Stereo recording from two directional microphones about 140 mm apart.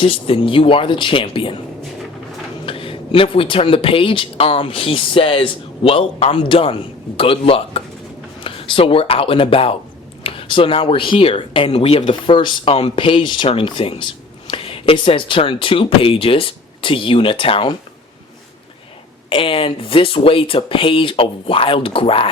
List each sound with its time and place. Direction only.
0.0 s speech: 40° left (ahead or behind)
2.6 s speech: 40° left (ahead or behind)
19.3 s speech: 40° left (ahead or behind)